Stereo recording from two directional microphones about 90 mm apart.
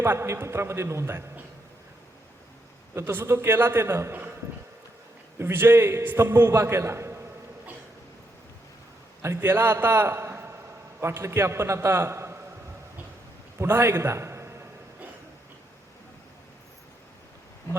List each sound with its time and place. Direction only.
0.0 s a man's voice: 30° right (ahead or behind)
2.9 s a man's voice: 25° right (ahead or behind)
5.4 s a man's voice: 25° right (ahead or behind)
9.2 s a man's voice: 30° right (ahead or behind)
13.6 s a man's voice: 25° right (ahead or behind)